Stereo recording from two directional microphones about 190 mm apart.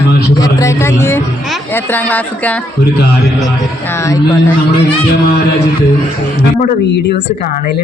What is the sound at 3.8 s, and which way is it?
Speech, 15° left (ahead or behind).